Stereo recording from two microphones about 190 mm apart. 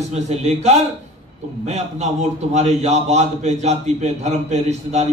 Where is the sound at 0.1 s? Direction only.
35° right (ahead or behind).